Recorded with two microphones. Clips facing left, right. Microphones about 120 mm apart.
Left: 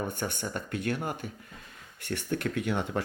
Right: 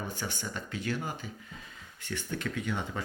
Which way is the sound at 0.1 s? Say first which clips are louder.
Left 4 dB; 55° left (ahead or behind).